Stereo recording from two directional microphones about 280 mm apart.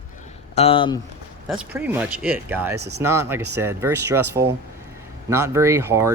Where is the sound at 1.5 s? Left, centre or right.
Centre.